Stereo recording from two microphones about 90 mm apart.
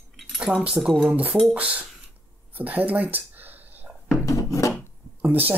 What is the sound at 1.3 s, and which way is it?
Mechanisms, 5° right (ahead or behind).